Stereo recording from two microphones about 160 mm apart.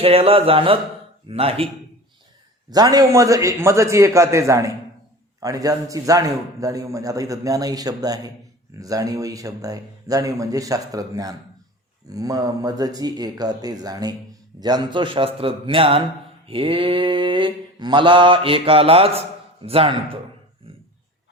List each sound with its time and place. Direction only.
0.0 s mantra: 35° right (ahead or behind)
2.6 s a man's voice: 25° right (ahead or behind)
14.6 s mantra: 25° right (ahead or behind)